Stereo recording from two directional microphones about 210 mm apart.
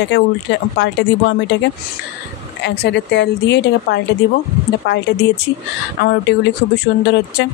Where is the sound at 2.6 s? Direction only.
55° left (ahead or behind).